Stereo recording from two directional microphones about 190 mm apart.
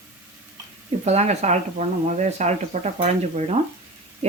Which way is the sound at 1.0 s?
35° right (ahead or behind).